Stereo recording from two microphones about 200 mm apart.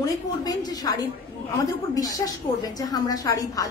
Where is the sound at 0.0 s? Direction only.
20° left (ahead or behind).